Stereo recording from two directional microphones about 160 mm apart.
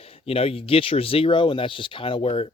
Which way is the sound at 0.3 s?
40° left (ahead or behind).